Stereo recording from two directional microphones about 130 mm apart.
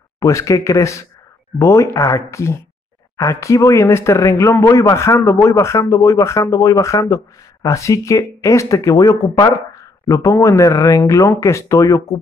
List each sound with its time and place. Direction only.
0.2 s speech: 25° left (ahead or behind)